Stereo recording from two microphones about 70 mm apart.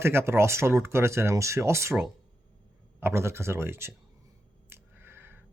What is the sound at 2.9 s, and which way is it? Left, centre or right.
Speech, right.